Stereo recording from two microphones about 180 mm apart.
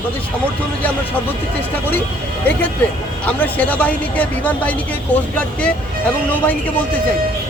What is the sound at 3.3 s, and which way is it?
Speech, 10° left (ahead or behind).